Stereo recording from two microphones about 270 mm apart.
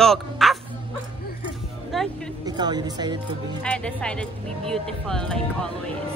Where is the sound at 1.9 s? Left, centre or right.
Centre.